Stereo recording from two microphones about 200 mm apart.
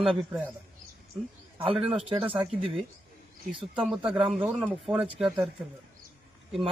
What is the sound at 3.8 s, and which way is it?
A man's voice, 5° right (ahead or behind).